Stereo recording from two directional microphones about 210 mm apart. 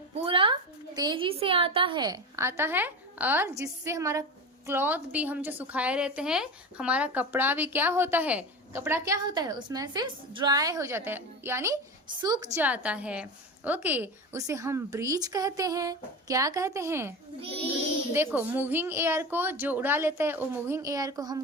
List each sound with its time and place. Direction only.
0.3 s a sound: 25° right (ahead or behind)
0.9 s a woman's voice: 20° right (ahead or behind)
12.5 s a woman's voice: 5° right (ahead or behind)